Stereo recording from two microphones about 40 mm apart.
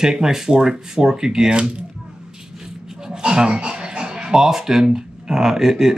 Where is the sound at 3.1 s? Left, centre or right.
Right.